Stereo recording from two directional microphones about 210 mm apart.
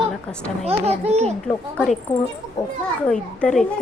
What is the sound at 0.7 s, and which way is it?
Speech, 30° right (ahead or behind).